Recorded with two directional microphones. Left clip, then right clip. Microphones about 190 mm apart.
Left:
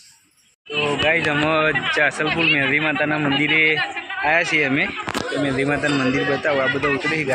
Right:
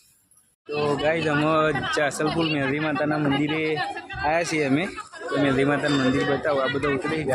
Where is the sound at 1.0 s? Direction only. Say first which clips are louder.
Left 6 dB; 5° right (ahead or behind).